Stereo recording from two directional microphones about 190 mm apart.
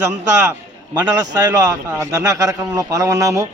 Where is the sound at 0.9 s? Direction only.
20° right (ahead or behind).